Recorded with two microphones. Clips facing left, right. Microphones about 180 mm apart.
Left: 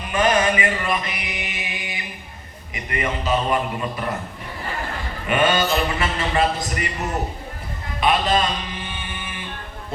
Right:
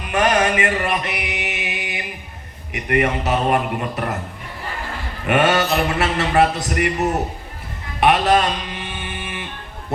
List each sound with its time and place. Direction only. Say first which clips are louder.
0.1 s mantra: right 1 dB; 70° right (ahead or behind)
2.7 s a man's voice: right 7 dB; 65° right (ahead or behind)
5.2 s a man's voice: right 3 dB; 70° right (ahead or behind)
8.0 s music: right 4 dB; 70° right (ahead or behind)